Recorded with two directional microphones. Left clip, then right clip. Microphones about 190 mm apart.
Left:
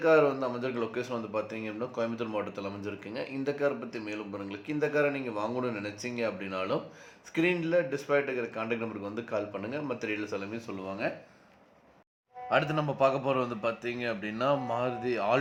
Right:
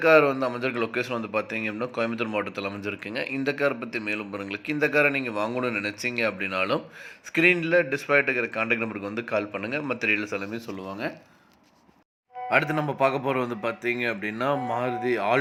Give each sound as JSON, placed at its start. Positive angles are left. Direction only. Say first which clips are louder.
{"t": 0.0, "sound": "a man's voice", "louder": "right 5 dB", "side_deg": -15}
{"t": 12.5, "sound": "a man's voice", "louder": "right 4 dB", "side_deg": -15}